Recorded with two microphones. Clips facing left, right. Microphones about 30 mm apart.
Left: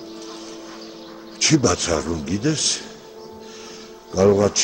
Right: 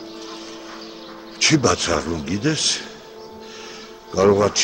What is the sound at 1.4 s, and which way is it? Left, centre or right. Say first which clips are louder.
Speech: right 1 dB; centre.